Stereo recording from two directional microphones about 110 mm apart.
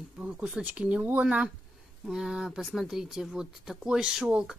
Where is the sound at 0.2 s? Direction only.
10° right (ahead or behind).